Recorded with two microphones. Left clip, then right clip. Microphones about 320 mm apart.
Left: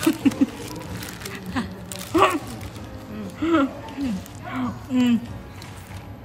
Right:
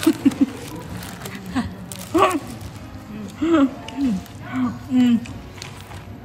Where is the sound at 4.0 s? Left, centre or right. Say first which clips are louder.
Right 6 dB; centre.